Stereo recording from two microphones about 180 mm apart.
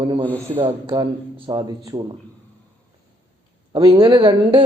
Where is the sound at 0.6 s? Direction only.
30° right (ahead or behind).